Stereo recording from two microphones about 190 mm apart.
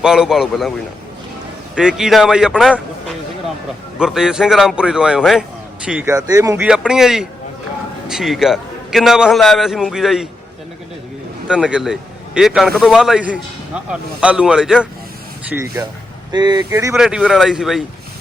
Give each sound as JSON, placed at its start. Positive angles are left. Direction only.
{"t": 0.0, "sound": "a man's voice", "side_deg": -5}
{"t": 1.7, "sound": "a man's voice", "side_deg": -5}
{"t": 6.7, "sound": "a man's voice", "side_deg": -5}
{"t": 11.4, "sound": "a man's voice", "side_deg": -5}
{"t": 15.4, "sound": "speech", "side_deg": -15}
{"t": 16.9, "sound": "a man's voice", "side_deg": -5}